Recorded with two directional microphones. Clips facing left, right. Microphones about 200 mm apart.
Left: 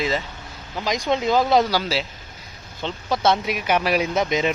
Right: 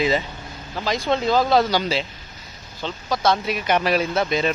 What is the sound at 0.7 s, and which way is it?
Speech, 15° left (ahead or behind).